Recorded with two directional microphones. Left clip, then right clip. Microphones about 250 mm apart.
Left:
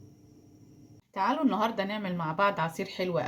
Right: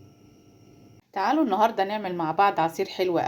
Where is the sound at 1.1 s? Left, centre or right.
Right.